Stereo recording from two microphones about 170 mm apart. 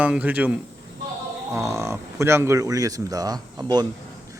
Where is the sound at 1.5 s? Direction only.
15° right (ahead or behind).